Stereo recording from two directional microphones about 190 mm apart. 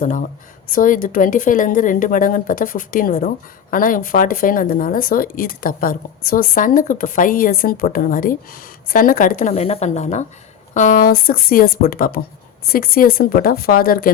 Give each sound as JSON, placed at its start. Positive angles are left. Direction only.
{"t": 0.0, "sound": "a woman's voice", "side_deg": 40}
{"t": 9.5, "sound": "a woman's voice", "side_deg": 35}